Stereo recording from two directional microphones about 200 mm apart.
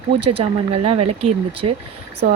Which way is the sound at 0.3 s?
30° right (ahead or behind).